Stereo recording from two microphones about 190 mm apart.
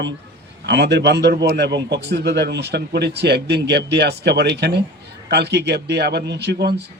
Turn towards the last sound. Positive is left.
turn(degrees=-60)  # may be behind; listen again after turning